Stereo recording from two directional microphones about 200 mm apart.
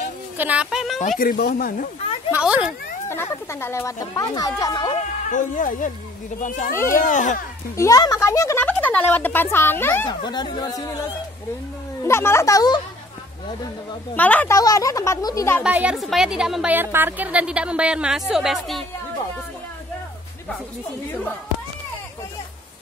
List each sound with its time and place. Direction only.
0.4 s a woman's voice: 5° right (ahead or behind)
0.9 s speech: 40° left (ahead or behind)
2.3 s a woman's voice: 5° right (ahead or behind)
3.1 s speech: 10° left (ahead or behind)
5.3 s speech: 40° left (ahead or behind)
6.7 s speech: 15° left (ahead or behind)
7.0 s speech: 40° left (ahead or behind)
7.7 s speech: 15° left (ahead or behind)
10.0 s speech: 20° left (ahead or behind)
12.0 s speech: 15° left (ahead or behind)
14.1 s speech: 10° left (ahead or behind)
15.6 s a woman's voice: 5° right (ahead or behind)